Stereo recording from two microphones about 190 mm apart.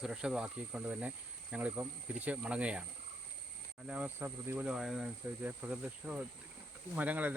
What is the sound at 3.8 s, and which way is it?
Speech, 5° right (ahead or behind).